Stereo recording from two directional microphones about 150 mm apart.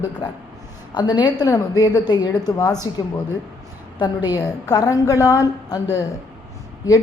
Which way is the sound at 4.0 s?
25° left (ahead or behind).